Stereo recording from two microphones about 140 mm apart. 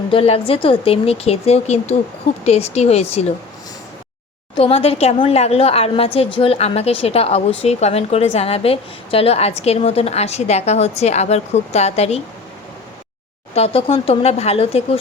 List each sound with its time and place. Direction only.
0.1 s a woman's voice: 45° left (ahead or behind)
4.5 s a woman's voice: 45° left (ahead or behind)
13.5 s a woman's voice: 45° left (ahead or behind)